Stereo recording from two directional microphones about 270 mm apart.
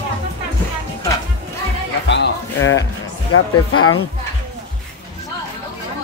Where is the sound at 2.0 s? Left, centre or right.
Left.